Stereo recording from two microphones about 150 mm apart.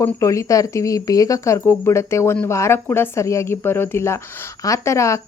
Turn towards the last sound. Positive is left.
turn(degrees=20)  # may be behind; listen again after turning